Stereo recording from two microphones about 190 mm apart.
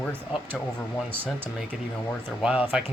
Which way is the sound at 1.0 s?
10° right (ahead or behind).